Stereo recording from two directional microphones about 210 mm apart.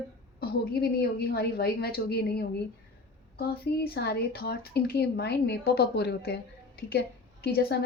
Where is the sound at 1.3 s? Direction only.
50° left (ahead or behind).